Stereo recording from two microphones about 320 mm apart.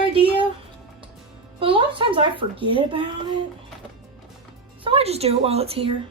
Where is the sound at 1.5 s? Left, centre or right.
Centre.